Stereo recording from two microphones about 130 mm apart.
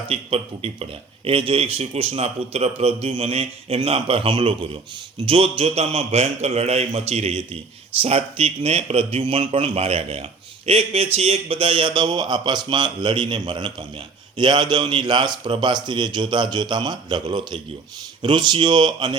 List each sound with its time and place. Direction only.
0.1 s a man's voice: 50° right (ahead or behind)